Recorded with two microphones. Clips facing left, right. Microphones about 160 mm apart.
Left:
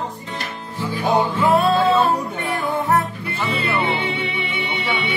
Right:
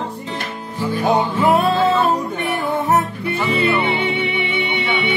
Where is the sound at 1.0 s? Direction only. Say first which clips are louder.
Right 1 dB; 20° right (ahead or behind).